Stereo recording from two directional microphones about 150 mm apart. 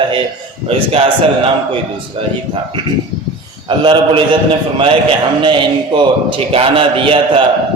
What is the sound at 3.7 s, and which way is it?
Speech, 35° right (ahead or behind).